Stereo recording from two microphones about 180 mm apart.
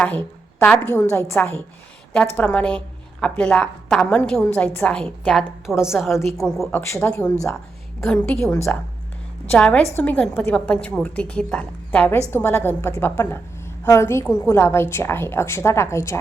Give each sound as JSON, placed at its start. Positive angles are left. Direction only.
{"t": 0.0, "sound": "a woman's voice", "side_deg": 10}
{"t": 8.5, "sound": "a woman's voice", "side_deg": 15}